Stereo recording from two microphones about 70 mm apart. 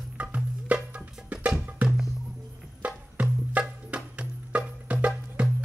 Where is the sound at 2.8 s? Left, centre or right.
Centre.